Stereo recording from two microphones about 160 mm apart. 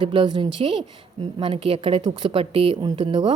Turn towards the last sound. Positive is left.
turn(degrees=-30)  # may be behind; listen again after turning